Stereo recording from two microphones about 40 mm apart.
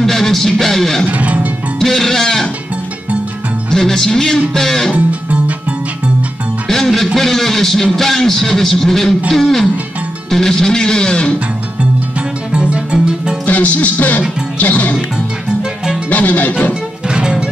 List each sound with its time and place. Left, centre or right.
0.0 s a man's voice: centre
1.0 s music: right
1.8 s music: centre
3.7 s a man's voice: centre
4.9 s music: right
6.7 s music: centre
7.2 s a man's voice: centre
9.3 s music: centre
10.3 s a man's voice: centre
12.5 s music: right
13.5 s music: left
16.1 s music: left
17.1 s music: right